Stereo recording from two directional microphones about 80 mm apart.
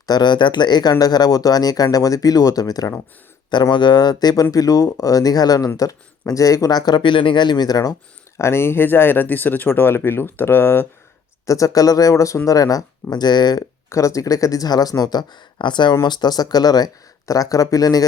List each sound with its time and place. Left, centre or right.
0.0 s speech: left
3.5 s speech: left
4.5 s speech: left
8.4 s speech: left
11.4 s speech: left
13.9 s speech: left